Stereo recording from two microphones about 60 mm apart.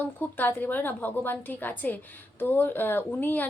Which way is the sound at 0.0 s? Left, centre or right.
Left.